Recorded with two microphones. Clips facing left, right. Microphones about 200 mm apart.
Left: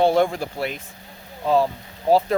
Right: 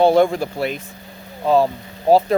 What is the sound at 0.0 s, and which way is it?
Speech, 40° right (ahead or behind).